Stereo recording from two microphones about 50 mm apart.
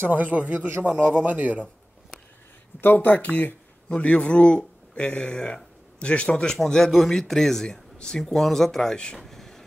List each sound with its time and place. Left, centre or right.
0.0 s a man's voice: right
2.8 s speech: left; by 6.6 s centre
6.9 s a man's voice: centre
9.2 s a sound: centre